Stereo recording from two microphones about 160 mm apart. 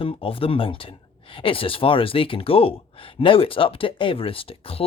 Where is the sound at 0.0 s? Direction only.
35° left (ahead or behind).